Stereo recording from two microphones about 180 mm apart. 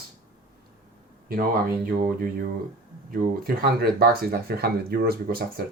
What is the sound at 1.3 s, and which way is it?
Speech, 55° right (ahead or behind).